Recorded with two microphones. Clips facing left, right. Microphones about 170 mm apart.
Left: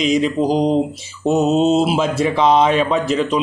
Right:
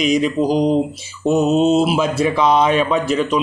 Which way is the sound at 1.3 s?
35° left (ahead or behind).